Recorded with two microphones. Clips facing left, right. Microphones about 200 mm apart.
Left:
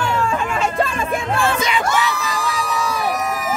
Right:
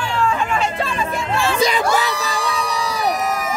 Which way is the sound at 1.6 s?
35° right (ahead or behind).